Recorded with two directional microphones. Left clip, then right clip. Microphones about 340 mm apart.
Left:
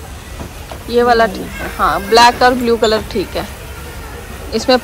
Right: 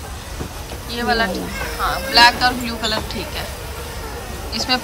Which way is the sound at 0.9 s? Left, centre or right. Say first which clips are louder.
Left 9 dB; centre.